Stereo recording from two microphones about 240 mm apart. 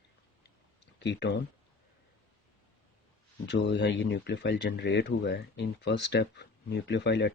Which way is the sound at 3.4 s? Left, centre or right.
Left.